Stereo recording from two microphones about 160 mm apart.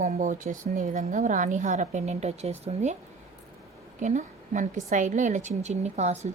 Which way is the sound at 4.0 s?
50° right (ahead or behind).